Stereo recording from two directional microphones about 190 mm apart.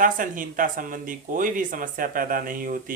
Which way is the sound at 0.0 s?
45° right (ahead or behind).